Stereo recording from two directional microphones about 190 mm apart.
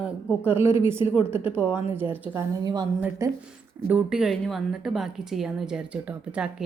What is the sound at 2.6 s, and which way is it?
A woman's voice, 20° right (ahead or behind).